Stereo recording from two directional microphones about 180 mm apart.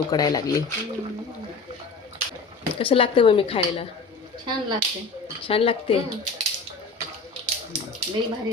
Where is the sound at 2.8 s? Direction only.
30° left (ahead or behind).